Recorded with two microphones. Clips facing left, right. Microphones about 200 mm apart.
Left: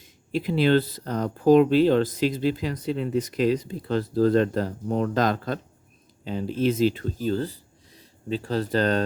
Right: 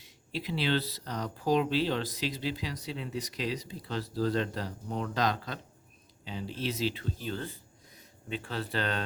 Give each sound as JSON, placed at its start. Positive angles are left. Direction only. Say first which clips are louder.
{"t": 0.0, "sound": "speech", "louder": "left 10 dB", "side_deg": 50}